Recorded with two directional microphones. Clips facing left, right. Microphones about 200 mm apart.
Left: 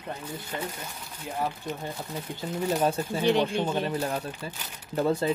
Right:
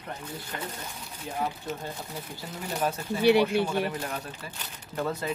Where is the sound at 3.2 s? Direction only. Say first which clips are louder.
Right 3 dB; 10° right (ahead or behind).